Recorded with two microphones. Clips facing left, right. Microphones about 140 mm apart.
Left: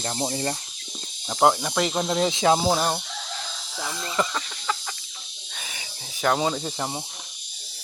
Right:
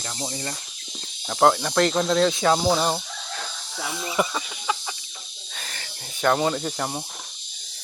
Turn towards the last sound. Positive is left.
turn(degrees=5)  # may be behind; listen again after turning